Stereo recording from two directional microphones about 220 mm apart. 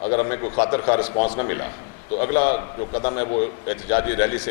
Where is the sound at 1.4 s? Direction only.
15° left (ahead or behind).